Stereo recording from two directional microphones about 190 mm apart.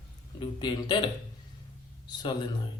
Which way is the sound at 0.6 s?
25° left (ahead or behind).